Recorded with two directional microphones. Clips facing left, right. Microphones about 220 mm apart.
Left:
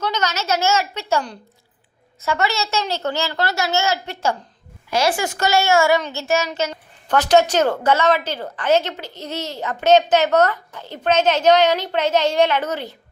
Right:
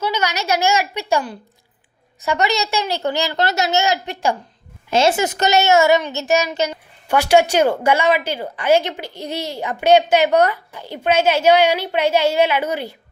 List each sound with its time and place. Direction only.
0.0 s a child's voice: 10° right (ahead or behind)